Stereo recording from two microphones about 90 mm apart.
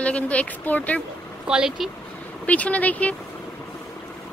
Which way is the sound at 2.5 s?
15° left (ahead or behind).